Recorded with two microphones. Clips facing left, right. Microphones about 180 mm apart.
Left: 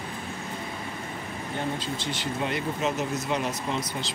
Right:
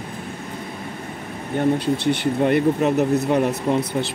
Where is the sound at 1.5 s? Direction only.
55° right (ahead or behind).